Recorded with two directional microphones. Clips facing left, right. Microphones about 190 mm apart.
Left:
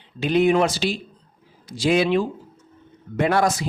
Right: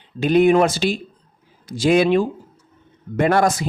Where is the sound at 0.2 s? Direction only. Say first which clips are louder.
Right 4 dB; 50° right (ahead or behind).